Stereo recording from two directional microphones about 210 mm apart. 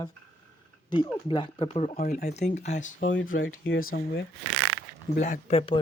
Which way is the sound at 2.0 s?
45° left (ahead or behind).